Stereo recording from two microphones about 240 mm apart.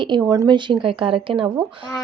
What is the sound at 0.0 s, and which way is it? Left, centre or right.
Speech, centre.